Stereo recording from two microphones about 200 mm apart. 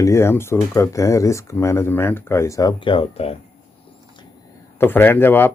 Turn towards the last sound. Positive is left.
turn(degrees=10)  # may be behind; listen again after turning